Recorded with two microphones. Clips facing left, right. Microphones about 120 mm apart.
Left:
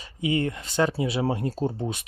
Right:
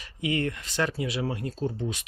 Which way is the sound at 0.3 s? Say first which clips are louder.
Left 3 dB; 25° left (ahead or behind).